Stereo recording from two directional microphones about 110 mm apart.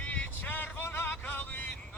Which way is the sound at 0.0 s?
15° left (ahead or behind).